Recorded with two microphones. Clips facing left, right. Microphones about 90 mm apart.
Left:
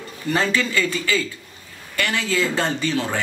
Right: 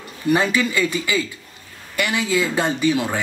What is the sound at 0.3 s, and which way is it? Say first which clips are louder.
Speech: right 3 dB; 15° right (ahead or behind).